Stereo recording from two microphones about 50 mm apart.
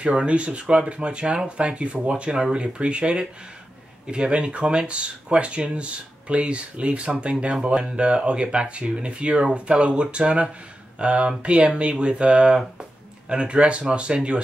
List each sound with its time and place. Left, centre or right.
0.0 s speech: right